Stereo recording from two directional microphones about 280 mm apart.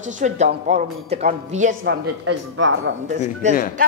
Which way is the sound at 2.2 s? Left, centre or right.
Right.